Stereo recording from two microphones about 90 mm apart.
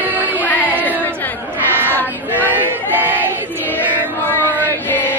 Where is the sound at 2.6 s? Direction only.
20° right (ahead or behind).